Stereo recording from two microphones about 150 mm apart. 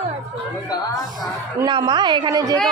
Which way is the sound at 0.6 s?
25° left (ahead or behind).